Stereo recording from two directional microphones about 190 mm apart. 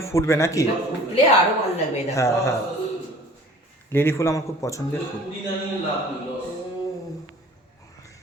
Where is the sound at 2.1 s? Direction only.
15° left (ahead or behind).